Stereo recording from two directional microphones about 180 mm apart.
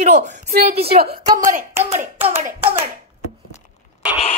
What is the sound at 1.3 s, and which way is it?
Speech, 45° right (ahead or behind).